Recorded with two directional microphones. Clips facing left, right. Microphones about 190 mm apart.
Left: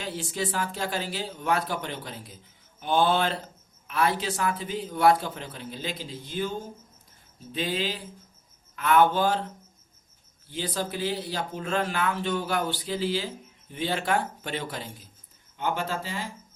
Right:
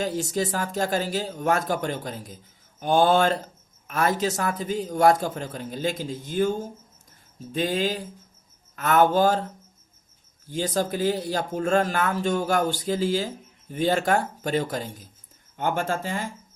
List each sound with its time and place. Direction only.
0.0 s speech: 45° right (ahead or behind)